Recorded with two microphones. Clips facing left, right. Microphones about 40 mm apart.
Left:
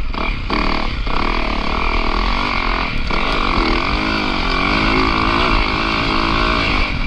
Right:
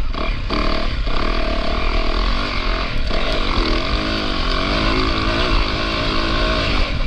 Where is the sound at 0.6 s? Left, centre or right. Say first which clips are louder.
Left 3 dB; left.